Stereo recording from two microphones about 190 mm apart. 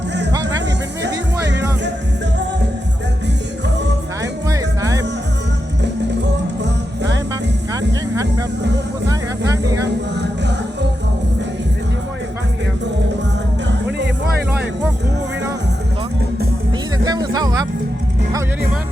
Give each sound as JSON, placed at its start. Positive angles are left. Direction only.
{"t": 1.0, "sound": "music", "side_deg": -65}
{"t": 4.2, "sound": "music", "side_deg": -15}
{"t": 7.7, "sound": "music", "side_deg": -20}
{"t": 9.8, "sound": "a sound", "side_deg": -65}
{"t": 17.0, "sound": "music", "side_deg": -20}